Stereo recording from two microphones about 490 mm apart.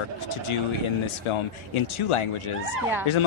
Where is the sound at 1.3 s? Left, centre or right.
Left.